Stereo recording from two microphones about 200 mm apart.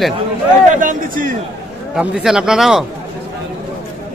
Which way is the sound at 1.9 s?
5° right (ahead or behind).